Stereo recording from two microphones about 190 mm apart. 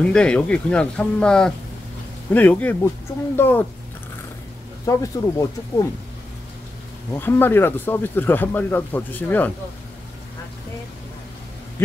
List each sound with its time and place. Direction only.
0.1 s speech: 5° left (ahead or behind)
4.8 s speech: 15° left (ahead or behind)
7.1 s speech: 10° left (ahead or behind)